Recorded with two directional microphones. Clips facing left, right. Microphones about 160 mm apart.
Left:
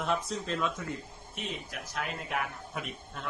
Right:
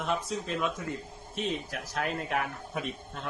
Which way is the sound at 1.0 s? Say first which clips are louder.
Right 6 dB; 40° right (ahead or behind).